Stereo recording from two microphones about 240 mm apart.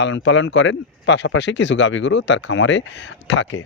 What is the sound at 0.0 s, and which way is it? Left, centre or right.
A man's voice, left.